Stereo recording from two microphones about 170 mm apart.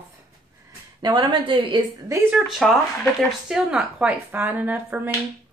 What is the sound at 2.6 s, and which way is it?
Speech, centre (ahead or behind).